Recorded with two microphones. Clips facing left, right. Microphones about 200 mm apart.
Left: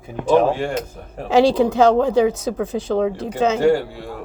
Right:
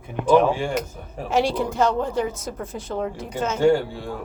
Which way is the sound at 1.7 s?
90° left.